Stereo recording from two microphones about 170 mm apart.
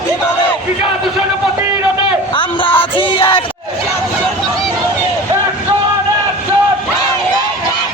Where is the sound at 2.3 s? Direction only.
30° left (ahead or behind).